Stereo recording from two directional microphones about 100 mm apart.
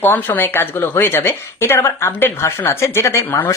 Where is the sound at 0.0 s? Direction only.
20° left (ahead or behind).